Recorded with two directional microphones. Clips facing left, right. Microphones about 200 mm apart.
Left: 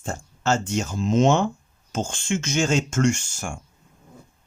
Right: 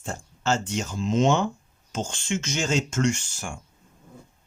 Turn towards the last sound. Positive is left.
turn(degrees=45)  # may be behind; listen again after turning